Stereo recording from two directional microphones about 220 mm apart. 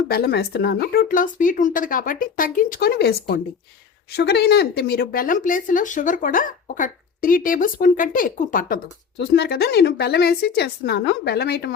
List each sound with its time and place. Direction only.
0.1 s speech: 45° left (ahead or behind)